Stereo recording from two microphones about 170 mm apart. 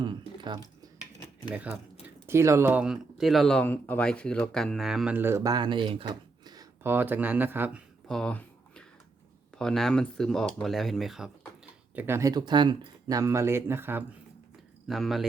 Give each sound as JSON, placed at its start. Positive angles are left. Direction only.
{"t": 0.0, "sound": "typing", "side_deg": -25}
{"t": 1.5, "sound": "speech", "side_deg": -10}
{"t": 6.8, "sound": "speech", "side_deg": -10}
{"t": 8.0, "sound": "a sound", "side_deg": 5}
{"t": 9.6, "sound": "speech", "side_deg": 5}
{"t": 11.9, "sound": "speech", "side_deg": -15}
{"t": 14.8, "sound": "speech", "side_deg": 0}